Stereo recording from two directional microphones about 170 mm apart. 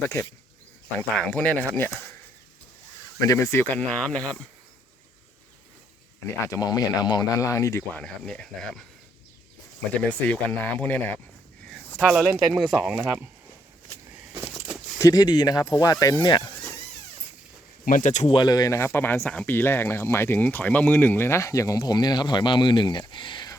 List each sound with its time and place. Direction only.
0.9 s speech: 5° left (ahead or behind)
3.2 s speech: 20° left (ahead or behind)
6.2 s speech: 15° left (ahead or behind)
7.9 s speech: 5° left (ahead or behind)
10.0 s speech: 10° left (ahead or behind)
11.9 s speech: 5° right (ahead or behind)
14.9 s speech: 20° left (ahead or behind)
17.8 s speech: 50° left (ahead or behind)
18.3 s speech: 20° left (ahead or behind)